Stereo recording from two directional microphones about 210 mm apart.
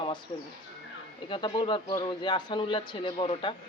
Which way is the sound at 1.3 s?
25° left (ahead or behind).